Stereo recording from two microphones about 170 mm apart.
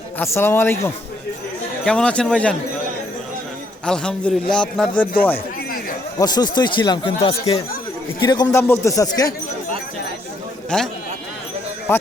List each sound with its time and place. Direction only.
0.2 s a man's voice: 15° left (ahead or behind)
1.8 s a man's voice: 5° left (ahead or behind)
3.8 s a man's voice: 5° left (ahead or behind)
6.1 s speech: 25° left (ahead or behind)
8.2 s speech: 25° left (ahead or behind)
10.7 s a man's voice: 5° left (ahead or behind)
11.9 s speech: 15° left (ahead or behind)